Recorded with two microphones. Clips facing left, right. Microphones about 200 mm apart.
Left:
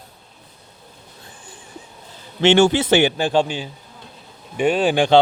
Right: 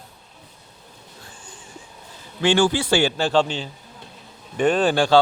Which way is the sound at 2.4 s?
25° left (ahead or behind).